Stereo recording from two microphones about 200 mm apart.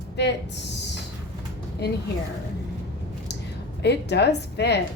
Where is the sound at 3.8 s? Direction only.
60° left (ahead or behind).